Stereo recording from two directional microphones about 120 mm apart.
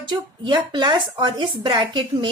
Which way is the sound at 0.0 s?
40° right (ahead or behind).